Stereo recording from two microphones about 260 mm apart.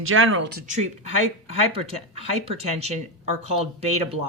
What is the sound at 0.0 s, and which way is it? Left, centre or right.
Speech, right.